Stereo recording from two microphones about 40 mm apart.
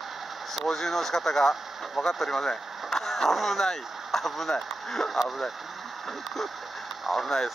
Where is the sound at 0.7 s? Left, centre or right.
Centre.